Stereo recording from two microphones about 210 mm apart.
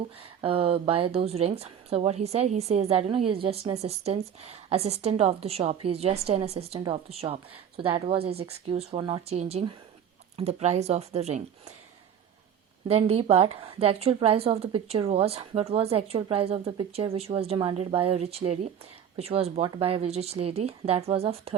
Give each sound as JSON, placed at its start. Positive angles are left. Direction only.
{"t": 0.2, "sound": "a woman's voice", "side_deg": -30}
{"t": 12.9, "sound": "a woman's voice", "side_deg": -30}